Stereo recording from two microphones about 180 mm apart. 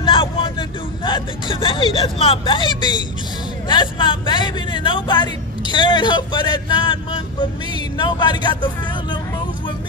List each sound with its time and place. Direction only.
0.0 s speech: 30° left (ahead or behind)